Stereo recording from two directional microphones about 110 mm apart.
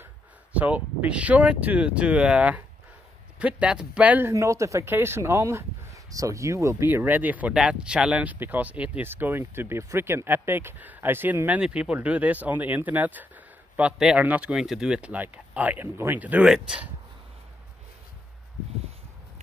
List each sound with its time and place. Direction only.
0.0 s speech: 15° right (ahead or behind)
4.3 s speech: 30° right (ahead or behind); by 16.9 s 5° right (ahead or behind)